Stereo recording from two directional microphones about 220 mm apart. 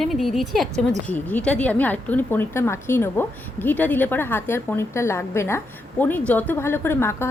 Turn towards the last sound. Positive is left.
turn(degrees=10)  # may be behind; listen again after turning